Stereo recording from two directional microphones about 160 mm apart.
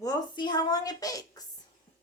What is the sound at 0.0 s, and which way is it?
A woman's voice, 25° left (ahead or behind).